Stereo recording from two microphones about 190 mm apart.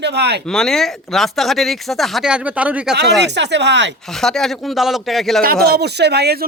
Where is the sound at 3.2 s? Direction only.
65° right (ahead or behind).